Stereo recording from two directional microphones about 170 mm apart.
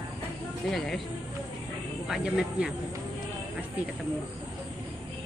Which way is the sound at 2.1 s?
5° right (ahead or behind).